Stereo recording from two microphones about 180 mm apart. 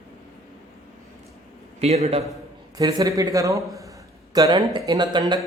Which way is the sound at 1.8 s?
35° right (ahead or behind).